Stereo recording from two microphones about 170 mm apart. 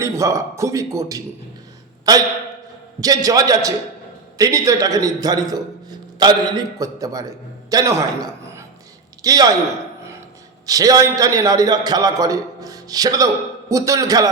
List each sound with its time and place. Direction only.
0.0 s a man's voice: 20° right (ahead or behind)
10.7 s a man's voice: 20° right (ahead or behind)